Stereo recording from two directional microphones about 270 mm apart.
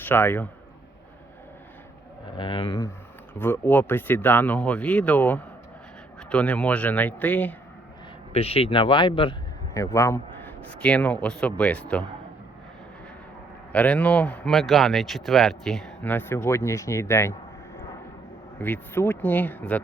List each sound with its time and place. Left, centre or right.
0.0 s a man's voice: centre
2.3 s speech: centre
8.3 s speech: left; by 12.0 s centre
13.7 s speech: centre
18.6 s speech: centre